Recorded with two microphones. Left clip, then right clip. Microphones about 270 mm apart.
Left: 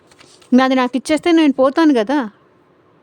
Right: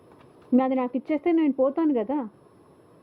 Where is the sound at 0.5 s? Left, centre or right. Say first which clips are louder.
Left 10 dB; left.